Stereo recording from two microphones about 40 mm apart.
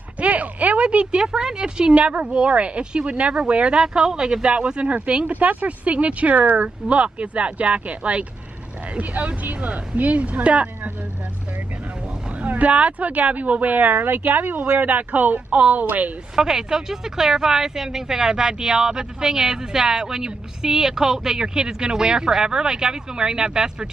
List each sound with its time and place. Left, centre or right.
0.2 s a sound: right
0.8 s speech: right
2.0 s speech: right
3.7 s speech: centre
4.5 s speech: right
5.3 s speech: right
12.4 s speech: right
16.3 s speech: centre